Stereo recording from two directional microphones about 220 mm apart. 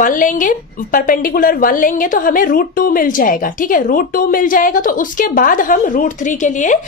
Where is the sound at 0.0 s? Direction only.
35° left (ahead or behind).